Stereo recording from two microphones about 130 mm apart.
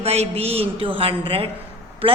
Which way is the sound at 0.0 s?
50° right (ahead or behind).